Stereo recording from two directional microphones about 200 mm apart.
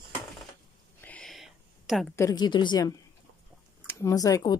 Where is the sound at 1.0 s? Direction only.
5° left (ahead or behind).